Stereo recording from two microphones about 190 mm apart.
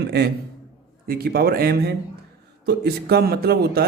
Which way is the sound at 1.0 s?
55° right (ahead or behind).